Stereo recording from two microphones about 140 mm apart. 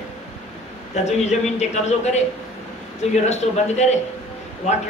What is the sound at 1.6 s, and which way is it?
Speech, 55° left (ahead or behind).